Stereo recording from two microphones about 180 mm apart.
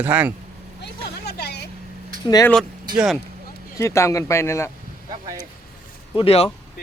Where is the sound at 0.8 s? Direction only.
65° left (ahead or behind).